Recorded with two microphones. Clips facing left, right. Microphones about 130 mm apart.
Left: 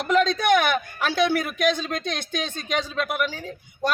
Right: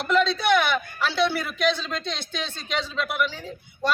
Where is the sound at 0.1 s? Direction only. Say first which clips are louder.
Left 1 dB; 45° left (ahead or behind).